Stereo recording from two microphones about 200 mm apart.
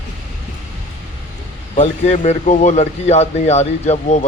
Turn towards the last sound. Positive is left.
turn(degrees=35)  # may be behind; listen again after turning